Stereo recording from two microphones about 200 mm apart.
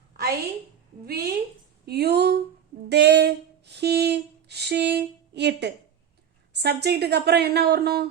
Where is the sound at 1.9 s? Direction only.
55° right (ahead or behind).